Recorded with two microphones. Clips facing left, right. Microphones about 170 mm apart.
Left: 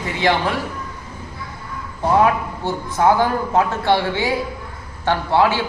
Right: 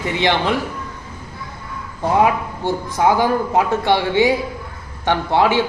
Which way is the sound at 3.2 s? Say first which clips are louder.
Right 1 dB; 15° right (ahead or behind).